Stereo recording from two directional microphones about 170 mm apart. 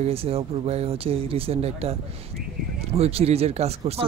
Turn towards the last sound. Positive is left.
turn(degrees=-40)  # may be behind; listen again after turning